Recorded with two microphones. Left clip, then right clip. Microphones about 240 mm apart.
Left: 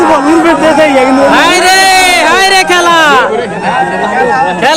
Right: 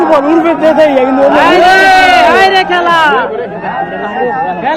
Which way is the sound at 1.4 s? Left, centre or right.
Left.